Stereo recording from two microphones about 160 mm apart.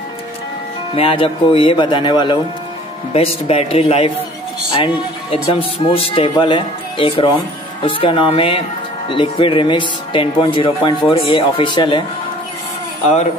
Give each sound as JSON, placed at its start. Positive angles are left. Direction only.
{"t": 0.9, "sound": "speech", "side_deg": 35}